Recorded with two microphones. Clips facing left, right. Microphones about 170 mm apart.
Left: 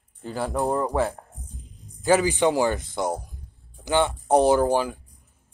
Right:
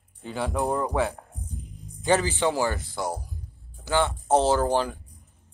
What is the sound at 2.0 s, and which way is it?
A man's voice, 10° left (ahead or behind).